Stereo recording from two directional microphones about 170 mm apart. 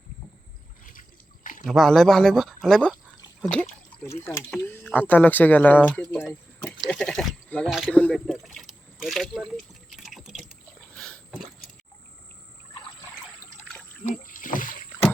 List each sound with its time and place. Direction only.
1.6 s speech: centre (ahead or behind)
4.5 s speech: 10° left (ahead or behind)
9.0 s drip: centre (ahead or behind)
10.9 s a sound: 5° left (ahead or behind)
14.0 s rowboat: 50° left (ahead or behind)